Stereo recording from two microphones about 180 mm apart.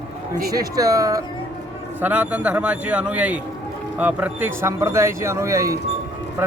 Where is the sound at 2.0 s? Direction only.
10° right (ahead or behind).